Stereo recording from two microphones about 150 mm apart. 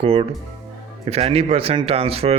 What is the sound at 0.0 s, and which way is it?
Speech, 40° right (ahead or behind).